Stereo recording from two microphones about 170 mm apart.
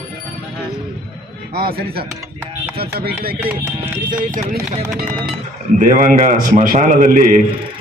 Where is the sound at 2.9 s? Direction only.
65° right (ahead or behind).